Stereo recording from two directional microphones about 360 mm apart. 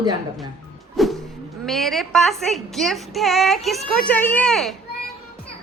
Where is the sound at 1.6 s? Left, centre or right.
Centre.